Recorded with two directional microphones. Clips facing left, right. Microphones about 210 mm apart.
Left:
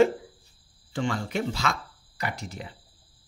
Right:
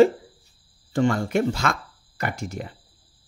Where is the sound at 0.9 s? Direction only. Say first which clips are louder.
Right 7 dB; 45° right (ahead or behind).